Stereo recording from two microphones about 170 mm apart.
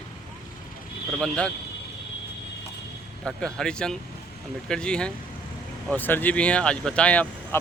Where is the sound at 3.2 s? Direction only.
5° left (ahead or behind).